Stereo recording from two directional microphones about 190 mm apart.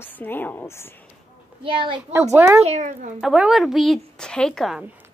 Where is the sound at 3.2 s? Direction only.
5° right (ahead or behind).